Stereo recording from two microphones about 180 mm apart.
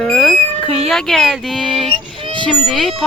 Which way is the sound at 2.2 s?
30° right (ahead or behind).